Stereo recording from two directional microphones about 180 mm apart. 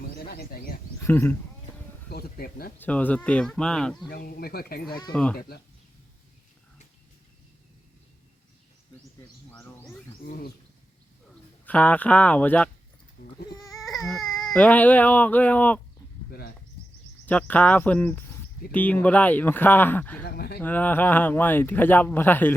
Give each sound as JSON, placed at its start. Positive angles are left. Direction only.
{"t": 0.3, "sound": "speech", "side_deg": 60}
{"t": 1.0, "sound": "speech", "side_deg": 10}
{"t": 2.0, "sound": "speech", "side_deg": 60}
{"t": 2.7, "sound": "speech", "side_deg": 10}
{"t": 4.1, "sound": "speech", "side_deg": 60}
{"t": 5.1, "sound": "speech", "side_deg": 5}
{"t": 10.2, "sound": "speech", "side_deg": 55}
{"t": 11.6, "sound": "speech", "side_deg": 10}
{"t": 16.3, "sound": "bird", "side_deg": 60}
{"t": 17.2, "sound": "speech", "side_deg": 10}
{"t": 20.2, "sound": "speech", "side_deg": 60}
{"t": 20.6, "sound": "speech", "side_deg": 10}